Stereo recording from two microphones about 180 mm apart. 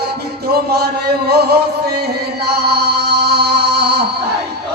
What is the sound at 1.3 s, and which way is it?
Music, 60° right (ahead or behind).